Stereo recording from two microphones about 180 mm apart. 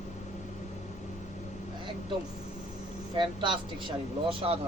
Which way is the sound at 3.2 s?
25° right (ahead or behind).